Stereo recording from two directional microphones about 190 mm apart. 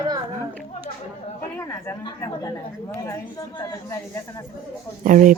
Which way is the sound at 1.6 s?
15° left (ahead or behind).